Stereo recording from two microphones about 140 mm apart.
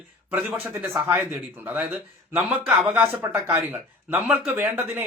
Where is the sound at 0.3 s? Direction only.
10° right (ahead or behind).